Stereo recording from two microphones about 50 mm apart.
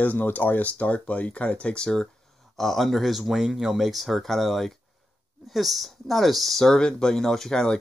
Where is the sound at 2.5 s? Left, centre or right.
Centre.